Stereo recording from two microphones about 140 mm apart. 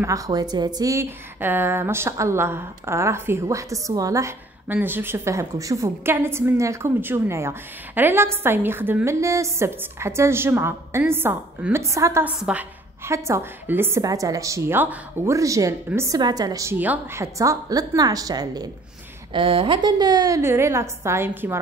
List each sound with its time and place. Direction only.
0.0 s a woman's voice: 25° right (ahead or behind)
12.4 s a sound: 10° right (ahead or behind)
13.1 s a woman's voice: 20° right (ahead or behind)
16.2 s a woman's voice: 30° right (ahead or behind)
16.7 s a woman's voice: 10° right (ahead or behind); by 18.7 s 30° right (ahead or behind)
19.3 s a woman's voice: 40° right (ahead or behind); by 21.5 s 20° right (ahead or behind)